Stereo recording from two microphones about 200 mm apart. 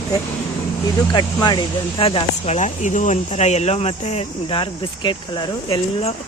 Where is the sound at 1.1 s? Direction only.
20° left (ahead or behind).